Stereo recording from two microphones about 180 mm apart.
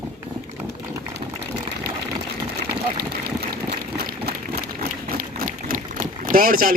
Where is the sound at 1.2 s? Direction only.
40° right (ahead or behind).